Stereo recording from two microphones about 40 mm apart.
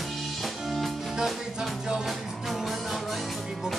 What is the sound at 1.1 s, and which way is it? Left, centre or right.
Music, centre.